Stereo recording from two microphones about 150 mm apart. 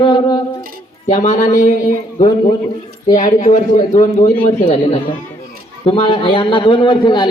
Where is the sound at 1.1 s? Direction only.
55° left (ahead or behind).